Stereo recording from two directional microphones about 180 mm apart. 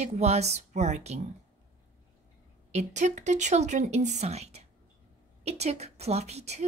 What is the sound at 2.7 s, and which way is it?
Speech, 40° right (ahead or behind).